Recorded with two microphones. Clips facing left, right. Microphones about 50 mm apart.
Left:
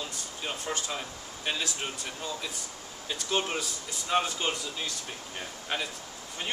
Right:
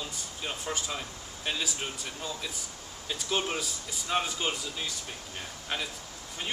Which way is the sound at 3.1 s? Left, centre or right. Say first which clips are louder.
Left 1 dB; centre.